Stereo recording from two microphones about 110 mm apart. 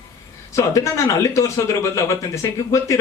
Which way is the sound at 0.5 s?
25° left (ahead or behind).